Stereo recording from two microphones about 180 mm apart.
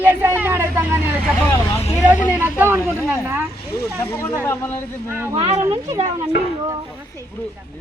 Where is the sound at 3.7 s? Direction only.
60° left (ahead or behind).